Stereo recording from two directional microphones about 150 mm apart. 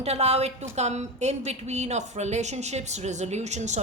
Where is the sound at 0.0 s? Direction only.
45° right (ahead or behind).